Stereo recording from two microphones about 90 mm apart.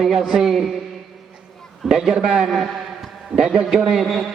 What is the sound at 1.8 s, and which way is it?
A man's voice, 5° right (ahead or behind).